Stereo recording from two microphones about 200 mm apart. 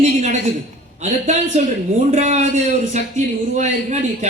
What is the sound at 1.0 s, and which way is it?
Speech, 35° right (ahead or behind).